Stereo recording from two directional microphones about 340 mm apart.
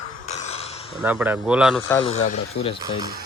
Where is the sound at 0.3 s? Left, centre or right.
Centre.